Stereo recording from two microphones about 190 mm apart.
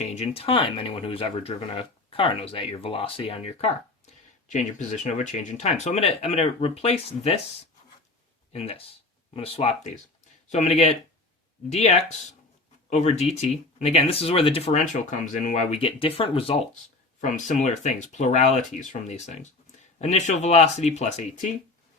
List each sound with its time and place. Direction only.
0.0 s speech: 35° left (ahead or behind)
8.5 s speech: 30° left (ahead or behind)
17.2 s speech: 40° left (ahead or behind)